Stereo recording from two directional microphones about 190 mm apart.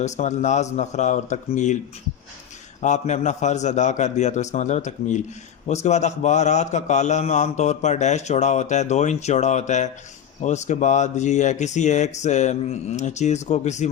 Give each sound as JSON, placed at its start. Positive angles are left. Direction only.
{"t": 0.0, "sound": "a man's voice", "side_deg": 35}
{"t": 2.8, "sound": "a man's voice", "side_deg": 40}